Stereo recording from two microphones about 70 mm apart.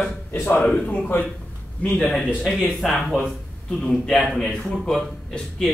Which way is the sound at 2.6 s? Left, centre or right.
Centre.